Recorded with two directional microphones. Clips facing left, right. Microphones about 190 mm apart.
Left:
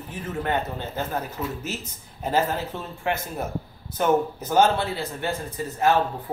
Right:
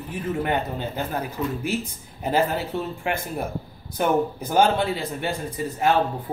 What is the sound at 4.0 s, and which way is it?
Speech, 15° right (ahead or behind).